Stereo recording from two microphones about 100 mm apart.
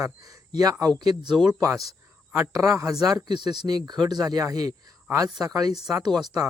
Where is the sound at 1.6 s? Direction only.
35° right (ahead or behind).